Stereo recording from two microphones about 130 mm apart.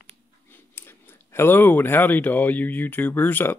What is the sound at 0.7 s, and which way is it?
Speech, 15° left (ahead or behind).